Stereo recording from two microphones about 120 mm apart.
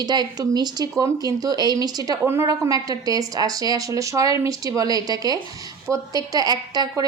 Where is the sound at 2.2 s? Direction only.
20° right (ahead or behind).